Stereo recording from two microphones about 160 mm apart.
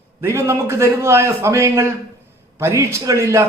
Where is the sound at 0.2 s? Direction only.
15° right (ahead or behind).